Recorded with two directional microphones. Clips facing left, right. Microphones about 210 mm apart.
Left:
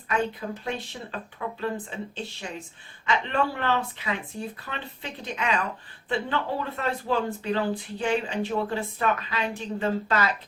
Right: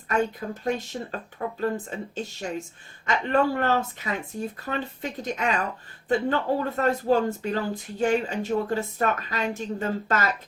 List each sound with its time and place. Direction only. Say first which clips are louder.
0.1 s speech: right 2 dB; 45° right (ahead or behind)